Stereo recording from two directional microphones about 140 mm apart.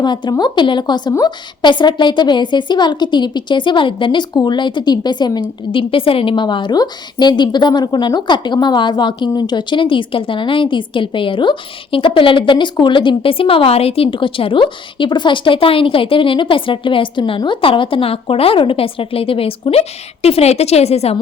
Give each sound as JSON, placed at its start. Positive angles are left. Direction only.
{"t": 0.0, "sound": "a woman's voice", "side_deg": 30}